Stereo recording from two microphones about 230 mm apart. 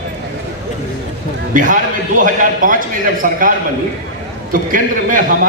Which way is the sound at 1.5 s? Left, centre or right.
Right.